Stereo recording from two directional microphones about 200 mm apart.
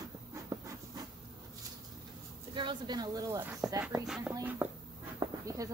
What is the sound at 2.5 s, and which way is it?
Speech, 25° right (ahead or behind).